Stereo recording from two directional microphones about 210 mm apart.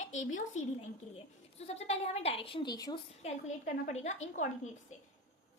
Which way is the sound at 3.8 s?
35° left (ahead or behind).